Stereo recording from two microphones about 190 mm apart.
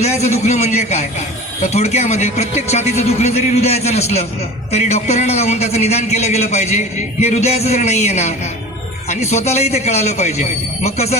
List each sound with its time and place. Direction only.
0.0 s a man's voice: 35° left (ahead or behind)